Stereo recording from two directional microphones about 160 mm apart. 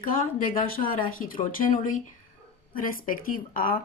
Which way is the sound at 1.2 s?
60° left (ahead or behind).